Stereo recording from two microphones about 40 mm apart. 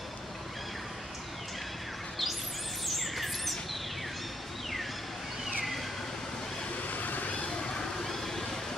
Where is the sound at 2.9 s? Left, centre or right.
Centre.